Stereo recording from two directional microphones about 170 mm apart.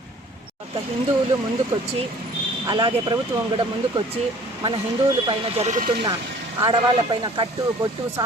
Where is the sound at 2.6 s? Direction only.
25° right (ahead or behind).